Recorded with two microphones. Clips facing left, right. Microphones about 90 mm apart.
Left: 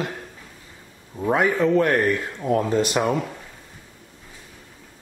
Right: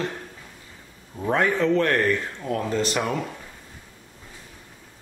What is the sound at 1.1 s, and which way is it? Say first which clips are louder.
Speech: left 2 dB; 10° left (ahead or behind).